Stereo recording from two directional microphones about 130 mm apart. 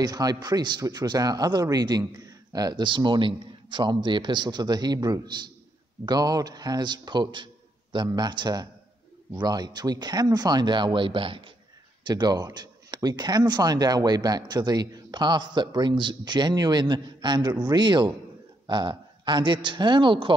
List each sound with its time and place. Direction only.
0.0 s speech: 30° right (ahead or behind)